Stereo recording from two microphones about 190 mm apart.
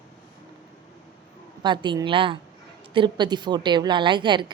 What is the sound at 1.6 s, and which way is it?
A woman's voice, 25° right (ahead or behind).